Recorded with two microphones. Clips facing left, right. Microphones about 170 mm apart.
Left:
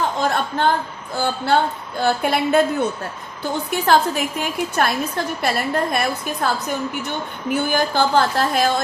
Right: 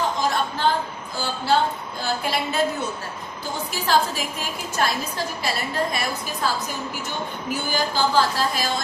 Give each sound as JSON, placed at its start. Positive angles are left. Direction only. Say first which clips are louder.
{"t": 0.2, "sound": "a sound", "louder": "left 3 dB", "side_deg": 60}
{"t": 1.1, "sound": "a woman's voice", "louder": "left 3 dB", "side_deg": 60}
{"t": 3.7, "sound": "a woman's voice", "louder": "left 4 dB", "side_deg": 60}
{"t": 7.5, "sound": "a woman's voice", "louder": "left 6 dB", "side_deg": 55}